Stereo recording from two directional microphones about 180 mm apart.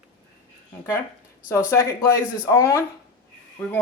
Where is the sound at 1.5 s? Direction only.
15° left (ahead or behind).